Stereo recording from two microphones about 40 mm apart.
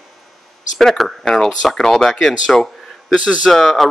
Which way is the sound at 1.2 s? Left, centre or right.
Centre.